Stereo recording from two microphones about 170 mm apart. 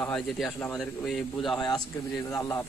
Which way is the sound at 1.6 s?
25° left (ahead or behind).